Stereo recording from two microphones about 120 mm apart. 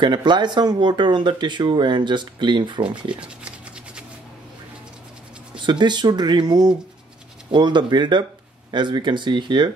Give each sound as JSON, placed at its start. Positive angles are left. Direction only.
{"t": 0.0, "sound": "speech", "side_deg": -40}
{"t": 3.2, "sound": "scratch", "side_deg": -10}
{"t": 5.7, "sound": "speech", "side_deg": -40}